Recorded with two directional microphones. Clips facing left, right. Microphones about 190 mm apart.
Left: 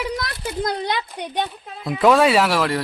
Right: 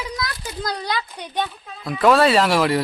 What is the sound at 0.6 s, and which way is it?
Speech, 25° left (ahead or behind).